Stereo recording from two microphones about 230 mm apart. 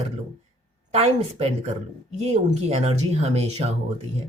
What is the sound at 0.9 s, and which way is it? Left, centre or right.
Speech, right.